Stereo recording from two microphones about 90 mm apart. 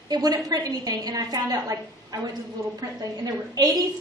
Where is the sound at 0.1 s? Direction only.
45° right (ahead or behind).